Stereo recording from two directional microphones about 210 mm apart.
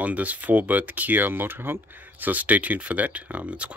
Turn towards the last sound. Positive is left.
turn(degrees=-5)  # may be behind; listen again after turning